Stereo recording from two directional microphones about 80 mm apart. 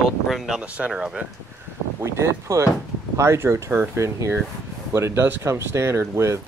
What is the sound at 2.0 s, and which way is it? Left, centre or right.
Speech, right.